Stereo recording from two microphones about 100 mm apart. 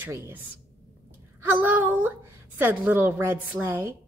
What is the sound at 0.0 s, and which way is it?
A woman's voice, 25° right (ahead or behind).